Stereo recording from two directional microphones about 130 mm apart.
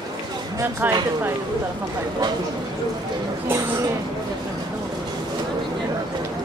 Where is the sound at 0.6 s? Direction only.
15° right (ahead or behind).